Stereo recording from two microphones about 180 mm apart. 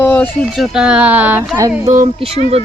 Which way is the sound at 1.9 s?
35° right (ahead or behind).